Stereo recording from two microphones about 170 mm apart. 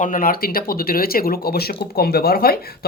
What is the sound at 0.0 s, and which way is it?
Speech, 55° left (ahead or behind).